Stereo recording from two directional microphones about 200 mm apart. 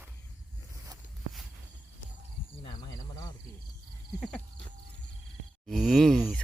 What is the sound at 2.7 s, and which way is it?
Snake, 20° left (ahead or behind).